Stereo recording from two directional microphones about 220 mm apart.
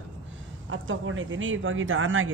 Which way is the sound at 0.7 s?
60° right (ahead or behind).